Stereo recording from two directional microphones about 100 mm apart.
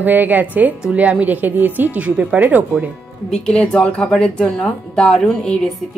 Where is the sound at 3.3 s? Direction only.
10° left (ahead or behind).